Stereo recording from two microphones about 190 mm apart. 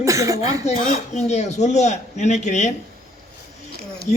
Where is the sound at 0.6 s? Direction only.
35° left (ahead or behind).